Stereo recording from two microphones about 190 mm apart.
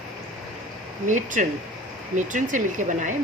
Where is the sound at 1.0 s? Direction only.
40° right (ahead or behind).